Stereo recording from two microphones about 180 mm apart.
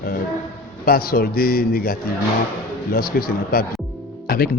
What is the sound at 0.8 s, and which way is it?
A man's voice, 55° left (ahead or behind).